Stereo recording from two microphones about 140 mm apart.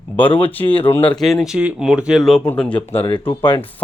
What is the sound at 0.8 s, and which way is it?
Speech, 15° left (ahead or behind).